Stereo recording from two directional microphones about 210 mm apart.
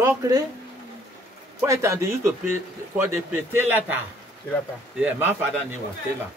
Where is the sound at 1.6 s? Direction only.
15° right (ahead or behind).